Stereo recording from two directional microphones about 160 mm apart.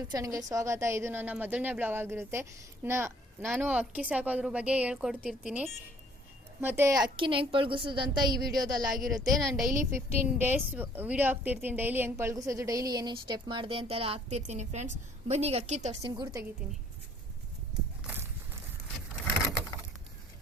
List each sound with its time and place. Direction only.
0.1 s a woman's voice: 20° right (ahead or behind)
9.3 s speech: centre (ahead or behind)
9.9 s a woman's voice: 10° right (ahead or behind); by 16.0 s 45° right (ahead or behind)
16.0 s a woman's voice: 30° right (ahead or behind)
18.0 s horse: 15° right (ahead or behind)